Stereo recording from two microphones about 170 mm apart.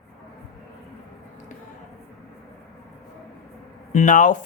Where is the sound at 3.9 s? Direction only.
50° left (ahead or behind).